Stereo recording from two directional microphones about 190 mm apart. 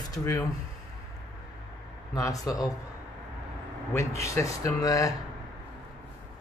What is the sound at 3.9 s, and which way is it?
Speech, 15° left (ahead or behind).